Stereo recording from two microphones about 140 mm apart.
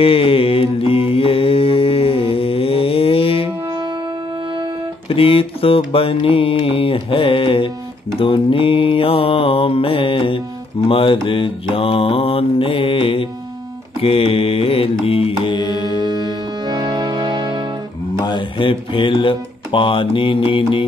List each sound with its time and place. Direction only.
0.0 s mantra: 40° left (ahead or behind)
5.0 s mantra: 40° left (ahead or behind)
15.0 s music: 40° left (ahead or behind)
16.0 s music: 30° right (ahead or behind)
18.1 s speech: 30° left (ahead or behind)